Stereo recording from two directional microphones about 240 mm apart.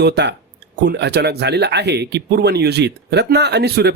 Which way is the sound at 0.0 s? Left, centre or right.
Right.